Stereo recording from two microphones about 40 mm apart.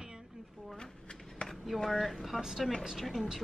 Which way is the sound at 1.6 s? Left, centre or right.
Centre.